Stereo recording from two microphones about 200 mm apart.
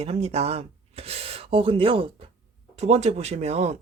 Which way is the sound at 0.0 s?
30° right (ahead or behind).